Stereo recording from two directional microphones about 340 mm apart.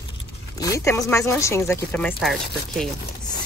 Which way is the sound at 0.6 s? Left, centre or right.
Centre.